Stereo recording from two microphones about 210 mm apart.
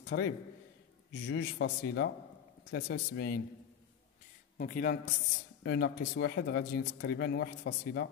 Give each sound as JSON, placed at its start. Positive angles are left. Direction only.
{"t": 0.0, "sound": "a man's voice", "side_deg": 50}
{"t": 4.6, "sound": "speech", "side_deg": 40}